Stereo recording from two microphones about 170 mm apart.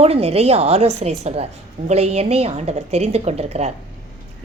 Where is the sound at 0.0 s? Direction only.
35° right (ahead or behind).